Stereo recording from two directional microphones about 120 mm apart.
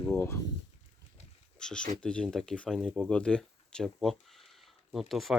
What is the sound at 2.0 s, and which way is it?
Speech, 5° left (ahead or behind).